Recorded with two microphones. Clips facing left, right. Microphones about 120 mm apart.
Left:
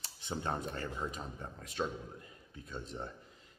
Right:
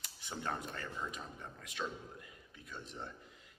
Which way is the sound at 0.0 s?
25° left (ahead or behind).